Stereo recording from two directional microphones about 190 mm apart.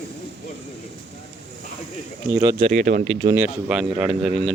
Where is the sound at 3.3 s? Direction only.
5° right (ahead or behind).